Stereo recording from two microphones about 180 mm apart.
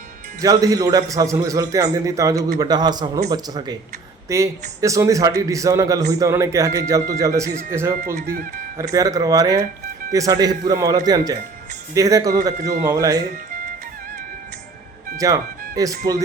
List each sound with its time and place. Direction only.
0.4 s a man's voice: 20° right (ahead or behind)
8.0 s speech: 55° right (ahead or behind)
8.8 s a man's voice: 20° right (ahead or behind)
15.2 s a man's voice: 20° right (ahead or behind)